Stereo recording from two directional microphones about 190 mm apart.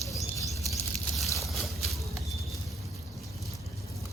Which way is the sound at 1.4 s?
Centre (ahead or behind).